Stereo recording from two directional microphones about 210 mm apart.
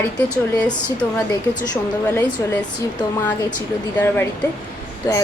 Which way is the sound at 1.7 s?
10° left (ahead or behind).